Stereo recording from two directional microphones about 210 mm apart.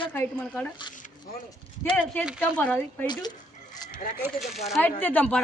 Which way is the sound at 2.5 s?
10° left (ahead or behind).